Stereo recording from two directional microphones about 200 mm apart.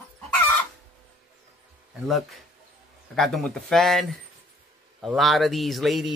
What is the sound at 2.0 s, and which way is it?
Speech, centre (ahead or behind).